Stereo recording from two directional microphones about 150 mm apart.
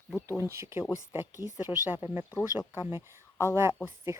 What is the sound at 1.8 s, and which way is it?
Speech, 15° right (ahead or behind).